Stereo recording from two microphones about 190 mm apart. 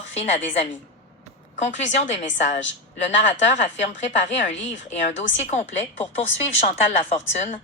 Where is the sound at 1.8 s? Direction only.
35° left (ahead or behind).